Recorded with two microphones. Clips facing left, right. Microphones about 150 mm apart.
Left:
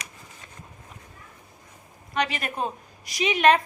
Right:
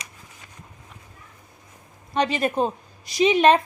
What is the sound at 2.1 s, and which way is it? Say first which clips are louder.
A woman's voice: right 6 dB; 30° right (ahead or behind).